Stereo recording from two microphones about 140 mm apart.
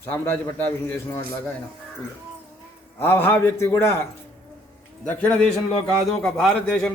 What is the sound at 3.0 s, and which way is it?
Speech, 15° left (ahead or behind).